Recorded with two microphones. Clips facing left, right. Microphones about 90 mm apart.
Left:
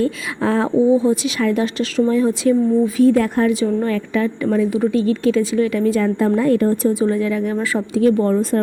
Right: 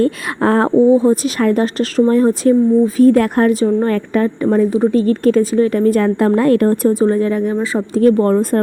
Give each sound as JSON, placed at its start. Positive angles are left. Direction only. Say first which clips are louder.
{"t": 0.0, "sound": "speech", "louder": "right 4 dB", "side_deg": -50}
{"t": 3.5, "sound": "a woman's voice", "louder": "right 4 dB", "side_deg": -40}
{"t": 7.0, "sound": "a woman's voice", "louder": "right 4 dB", "side_deg": -40}
{"t": 7.5, "sound": "speech", "louder": "right 3 dB", "side_deg": -20}
{"t": 7.9, "sound": "speech", "louder": "right 4 dB", "side_deg": -50}